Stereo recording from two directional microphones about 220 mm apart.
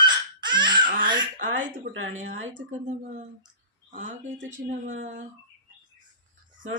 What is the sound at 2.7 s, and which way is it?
Speech, 30° right (ahead or behind).